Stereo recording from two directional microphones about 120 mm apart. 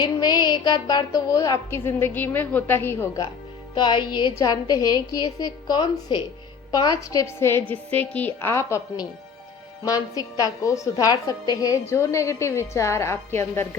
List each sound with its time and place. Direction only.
0.0 s a woman's voice: 35° left (ahead or behind); by 3.2 s 20° left (ahead or behind)
3.8 s a woman's voice: 40° left (ahead or behind); by 13.7 s 20° left (ahead or behind)